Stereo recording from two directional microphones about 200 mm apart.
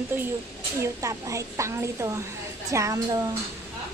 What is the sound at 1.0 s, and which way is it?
A woman's voice, 15° right (ahead or behind).